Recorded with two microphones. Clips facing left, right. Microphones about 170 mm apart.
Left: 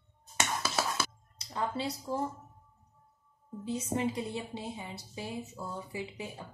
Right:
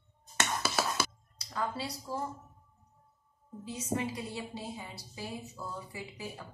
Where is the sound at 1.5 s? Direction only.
25° left (ahead or behind).